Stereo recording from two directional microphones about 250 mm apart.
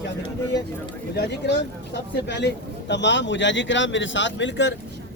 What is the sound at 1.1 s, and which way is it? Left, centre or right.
Speech, left.